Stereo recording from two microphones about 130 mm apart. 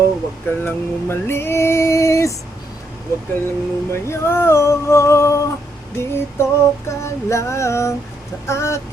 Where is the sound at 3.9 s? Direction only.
20° left (ahead or behind).